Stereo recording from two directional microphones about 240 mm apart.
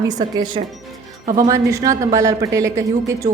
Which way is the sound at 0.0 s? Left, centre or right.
Centre.